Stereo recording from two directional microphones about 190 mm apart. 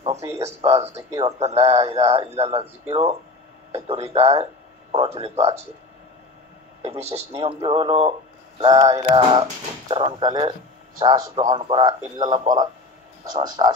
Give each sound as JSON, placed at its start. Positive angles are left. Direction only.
{"t": 0.4, "sound": "speech", "side_deg": -35}
{"t": 0.9, "sound": "speech", "side_deg": -20}
{"t": 1.4, "sound": "speech", "side_deg": -35}
{"t": 6.9, "sound": "speech", "side_deg": -35}